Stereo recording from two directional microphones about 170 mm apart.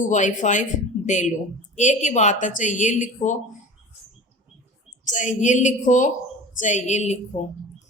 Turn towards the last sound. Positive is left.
turn(degrees=30)  # may be behind; listen again after turning